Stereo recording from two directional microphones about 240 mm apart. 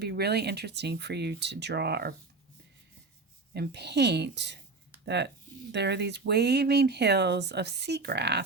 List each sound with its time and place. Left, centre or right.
0.0 s speech: right
3.5 s speech: right